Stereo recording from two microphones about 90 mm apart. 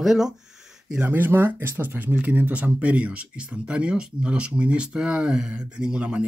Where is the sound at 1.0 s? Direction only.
20° right (ahead or behind).